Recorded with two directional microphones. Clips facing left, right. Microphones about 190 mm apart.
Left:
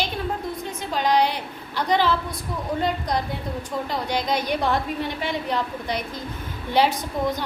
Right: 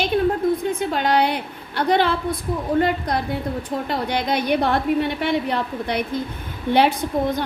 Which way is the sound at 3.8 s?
60° right (ahead or behind).